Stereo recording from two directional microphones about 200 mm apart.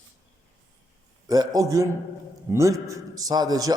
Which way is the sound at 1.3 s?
15° right (ahead or behind).